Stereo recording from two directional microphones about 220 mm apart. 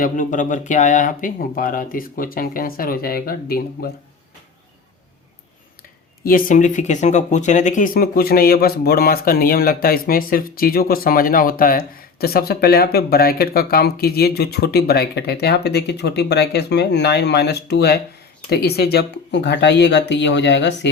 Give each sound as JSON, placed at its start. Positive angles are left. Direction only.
{"t": 0.0, "sound": "speech", "side_deg": 35}
{"t": 6.2, "sound": "speech", "side_deg": 40}